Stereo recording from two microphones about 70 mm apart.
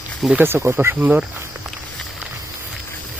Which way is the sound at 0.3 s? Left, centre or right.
Right.